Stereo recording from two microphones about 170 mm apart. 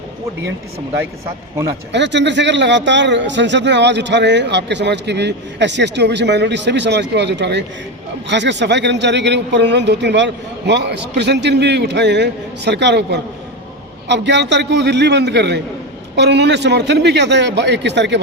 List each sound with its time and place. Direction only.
1.9 s a man's voice: 90° right